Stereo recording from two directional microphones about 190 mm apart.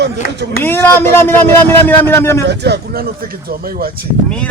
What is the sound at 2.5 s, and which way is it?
Speech, 60° right (ahead or behind).